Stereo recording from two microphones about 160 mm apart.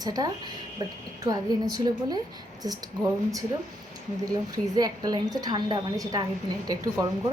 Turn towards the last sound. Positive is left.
turn(degrees=-25)  # may be behind; listen again after turning